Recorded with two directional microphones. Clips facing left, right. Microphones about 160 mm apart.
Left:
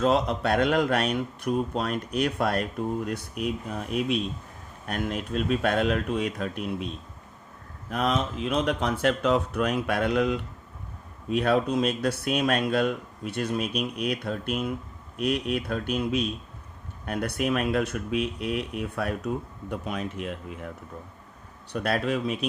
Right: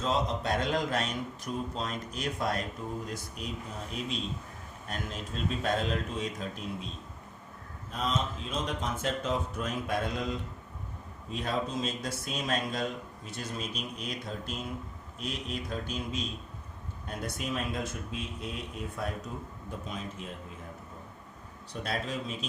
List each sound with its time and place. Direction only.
0.0 s speech: 65° left (ahead or behind)
7.9 s speech: 65° left (ahead or behind)
21.7 s speech: 65° left (ahead or behind)